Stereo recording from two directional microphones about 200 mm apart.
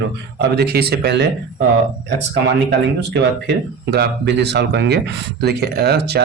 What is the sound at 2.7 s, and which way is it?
Speech, 60° right (ahead or behind).